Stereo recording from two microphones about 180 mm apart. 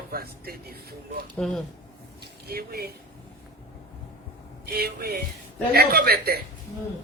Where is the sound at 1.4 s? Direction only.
Centre (ahead or behind).